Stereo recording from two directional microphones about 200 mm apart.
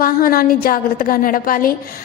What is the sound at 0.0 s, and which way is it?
A woman's voice, 45° left (ahead or behind).